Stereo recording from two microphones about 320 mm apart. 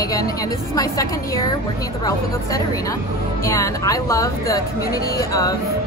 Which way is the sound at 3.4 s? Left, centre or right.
Centre.